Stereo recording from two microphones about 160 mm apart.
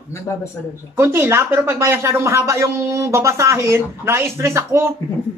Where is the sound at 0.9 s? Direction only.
15° right (ahead or behind).